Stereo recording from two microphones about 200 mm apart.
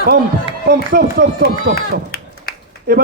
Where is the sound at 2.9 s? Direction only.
50° right (ahead or behind).